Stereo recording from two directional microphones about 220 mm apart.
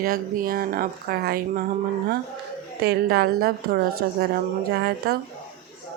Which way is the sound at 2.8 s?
45° right (ahead or behind).